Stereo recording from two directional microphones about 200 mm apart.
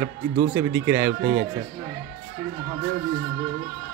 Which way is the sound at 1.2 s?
45° right (ahead or behind).